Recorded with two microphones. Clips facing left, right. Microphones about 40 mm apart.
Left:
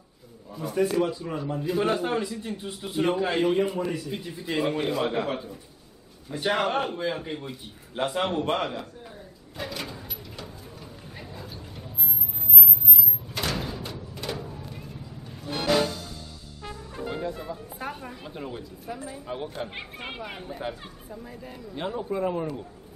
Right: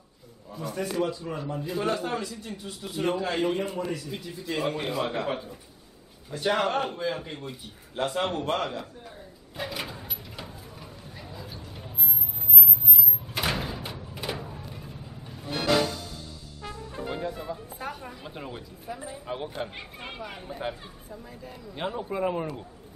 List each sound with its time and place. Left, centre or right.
0.6 s speech: centre
1.8 s a man's voice: centre
3.4 s speech: centre
3.9 s a man's voice: centre
9.6 s a sound: centre
13.3 s a sound: centre
16.6 s music: centre
17.7 s a sound: centre
18.2 s speech: centre
19.7 s a man's voice: left
20.4 s speech: centre
21.7 s speech: centre